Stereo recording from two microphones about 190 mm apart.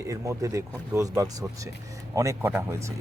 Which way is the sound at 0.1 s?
15° right (ahead or behind).